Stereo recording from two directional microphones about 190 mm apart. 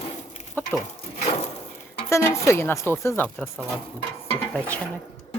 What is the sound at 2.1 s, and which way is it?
Speech, 15° left (ahead or behind).